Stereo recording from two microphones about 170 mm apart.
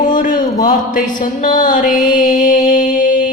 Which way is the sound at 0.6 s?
55° left (ahead or behind).